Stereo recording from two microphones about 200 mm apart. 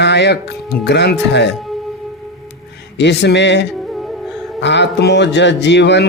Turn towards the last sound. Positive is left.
turn(degrees=60)  # may be behind; listen again after turning